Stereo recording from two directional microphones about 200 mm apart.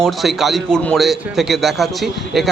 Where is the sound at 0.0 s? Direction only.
Centre (ahead or behind).